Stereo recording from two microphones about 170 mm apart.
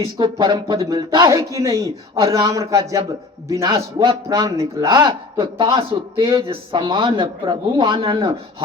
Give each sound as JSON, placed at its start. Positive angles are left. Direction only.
{"t": 0.0, "sound": "a man's voice", "side_deg": -25}